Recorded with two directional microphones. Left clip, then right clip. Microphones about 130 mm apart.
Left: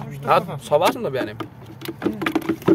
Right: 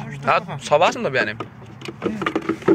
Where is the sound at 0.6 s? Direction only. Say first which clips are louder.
Right 2 dB; 20° left (ahead or behind).